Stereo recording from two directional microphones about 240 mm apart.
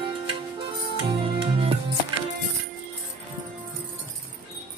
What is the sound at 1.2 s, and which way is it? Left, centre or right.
Music, right.